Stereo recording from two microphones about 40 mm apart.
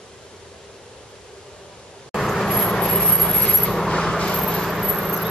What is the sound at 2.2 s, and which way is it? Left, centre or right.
Vehicle, centre.